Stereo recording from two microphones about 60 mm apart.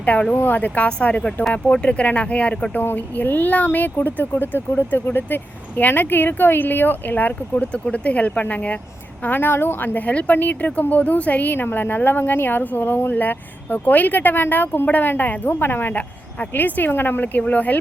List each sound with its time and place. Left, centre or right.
0.0 s speech: left
0.9 s speech: centre
2.8 s a woman's voice: left
7.5 s a woman's voice: centre; by 10.0 s left
10.1 s a woman's voice: left